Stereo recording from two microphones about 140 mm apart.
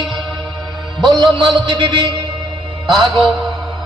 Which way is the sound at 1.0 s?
30° right (ahead or behind).